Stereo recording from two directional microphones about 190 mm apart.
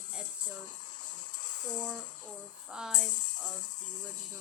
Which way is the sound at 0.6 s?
40° left (ahead or behind).